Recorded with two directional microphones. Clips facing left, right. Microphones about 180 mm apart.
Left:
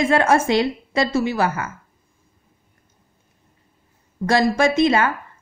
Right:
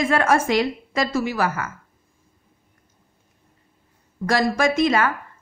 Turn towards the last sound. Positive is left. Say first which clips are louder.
# left 2 dB
turn(degrees=25)  # may be behind; listen again after turning